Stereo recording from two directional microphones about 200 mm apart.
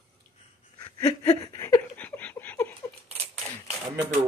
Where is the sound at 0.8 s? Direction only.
20° left (ahead or behind).